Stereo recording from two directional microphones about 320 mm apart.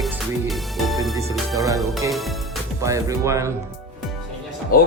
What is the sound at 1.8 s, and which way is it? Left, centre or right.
Speech, centre.